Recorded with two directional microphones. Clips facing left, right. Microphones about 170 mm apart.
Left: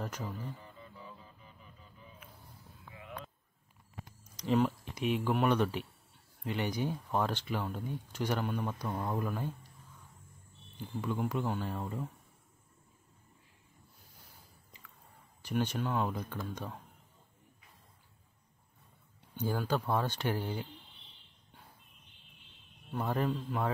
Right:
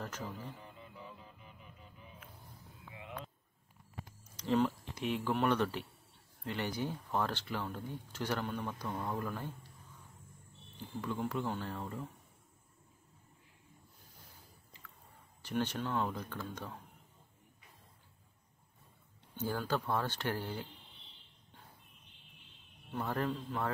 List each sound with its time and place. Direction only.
2.9 s a sound: 25° right (ahead or behind)
4.4 s speech: 15° left (ahead or behind)
11.0 s speech: 15° left (ahead or behind)
15.4 s speech: 15° left (ahead or behind)
19.3 s speech: 15° left (ahead or behind)
22.9 s speech: 15° left (ahead or behind)